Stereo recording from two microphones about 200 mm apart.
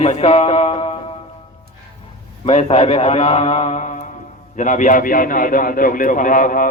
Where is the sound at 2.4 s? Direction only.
30° left (ahead or behind).